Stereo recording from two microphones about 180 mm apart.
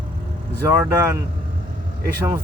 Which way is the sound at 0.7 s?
10° right (ahead or behind).